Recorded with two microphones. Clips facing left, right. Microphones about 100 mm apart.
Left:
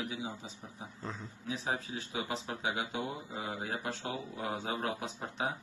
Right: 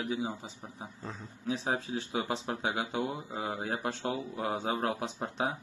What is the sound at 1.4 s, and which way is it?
Speech, 35° right (ahead or behind).